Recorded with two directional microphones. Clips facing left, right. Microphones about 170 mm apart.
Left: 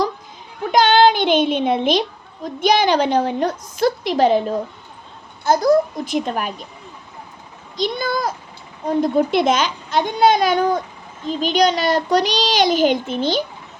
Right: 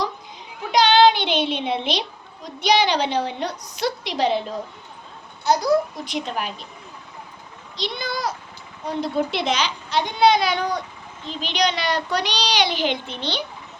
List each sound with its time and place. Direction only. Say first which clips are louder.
0.7 s a child's voice: left 2 dB; 50° left (ahead or behind)
7.8 s a child's voice: left 6 dB; 45° left (ahead or behind)